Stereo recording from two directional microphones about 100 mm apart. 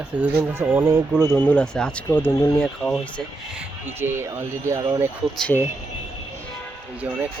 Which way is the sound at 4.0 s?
20° right (ahead or behind).